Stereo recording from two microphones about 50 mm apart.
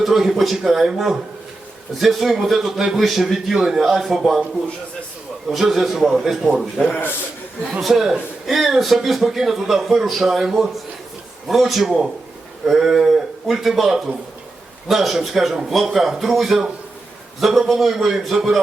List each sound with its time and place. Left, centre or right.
0.0 s a man's voice: centre
5.5 s a man's voice: centre
6.5 s speech: centre
7.8 s a man's voice: centre